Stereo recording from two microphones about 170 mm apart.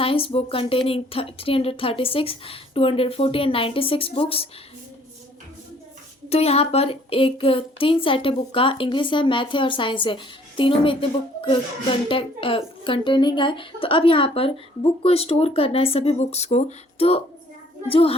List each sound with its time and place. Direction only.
0.0 s a woman's voice: 35° left (ahead or behind)
6.2 s a woman's voice: 35° left (ahead or behind)